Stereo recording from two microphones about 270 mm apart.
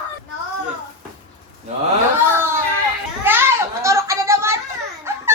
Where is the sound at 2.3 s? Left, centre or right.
Centre.